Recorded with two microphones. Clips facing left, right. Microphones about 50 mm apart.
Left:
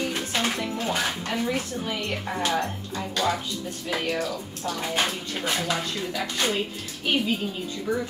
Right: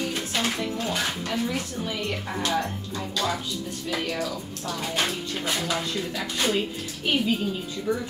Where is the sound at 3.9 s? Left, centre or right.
Left.